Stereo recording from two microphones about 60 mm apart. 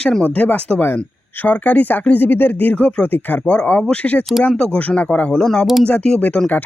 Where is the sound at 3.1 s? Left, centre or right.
Left.